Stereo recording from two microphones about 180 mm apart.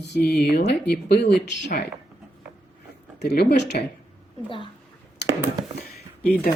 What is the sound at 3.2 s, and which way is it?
Speech, 65° left (ahead or behind).